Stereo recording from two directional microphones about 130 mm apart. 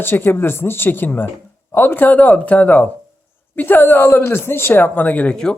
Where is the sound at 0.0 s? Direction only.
15° left (ahead or behind).